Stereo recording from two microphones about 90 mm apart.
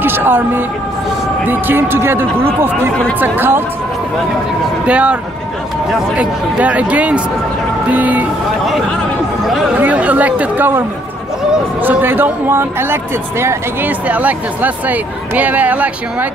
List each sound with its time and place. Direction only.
0.0 s a woman's voice: 25° right (ahead or behind)
4.8 s speech: 15° right (ahead or behind)
6.1 s speech: 15° right (ahead or behind)
9.8 s speech: 15° right (ahead or behind)
14.0 s speech: 15° right (ahead or behind)